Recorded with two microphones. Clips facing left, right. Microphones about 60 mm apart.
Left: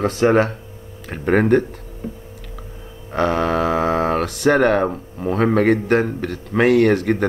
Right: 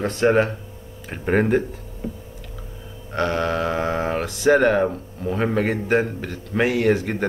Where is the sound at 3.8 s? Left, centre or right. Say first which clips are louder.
Left 5 dB; left.